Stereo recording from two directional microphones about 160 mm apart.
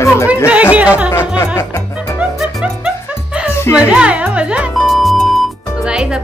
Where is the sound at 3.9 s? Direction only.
10° right (ahead or behind).